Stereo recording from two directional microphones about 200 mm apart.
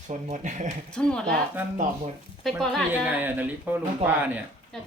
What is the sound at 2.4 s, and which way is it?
Speech, centre (ahead or behind).